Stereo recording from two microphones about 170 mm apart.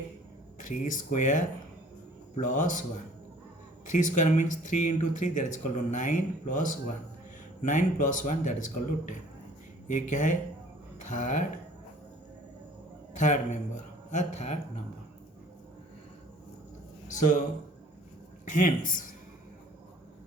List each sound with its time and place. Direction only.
0.6 s speech: 45° left (ahead or behind)
3.8 s speech: 45° left (ahead or behind)
13.1 s a man's voice: 45° left (ahead or behind)
17.1 s a man's voice: 50° left (ahead or behind)
18.4 s speech: 50° left (ahead or behind)